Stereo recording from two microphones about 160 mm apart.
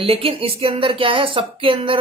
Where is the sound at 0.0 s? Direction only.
35° right (ahead or behind).